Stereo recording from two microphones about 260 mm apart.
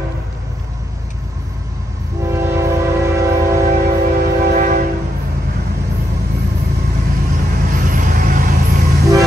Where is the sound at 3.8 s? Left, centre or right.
Right.